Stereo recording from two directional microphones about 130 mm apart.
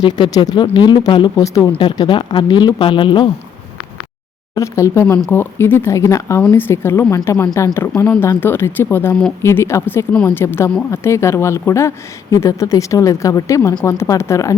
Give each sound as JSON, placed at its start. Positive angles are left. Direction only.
{"t": 0.0, "sound": "speech", "side_deg": 30}
{"t": 4.5, "sound": "speech", "side_deg": 25}
{"t": 5.0, "sound": "speech", "side_deg": 10}